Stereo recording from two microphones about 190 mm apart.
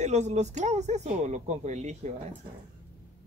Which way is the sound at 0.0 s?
35° right (ahead or behind).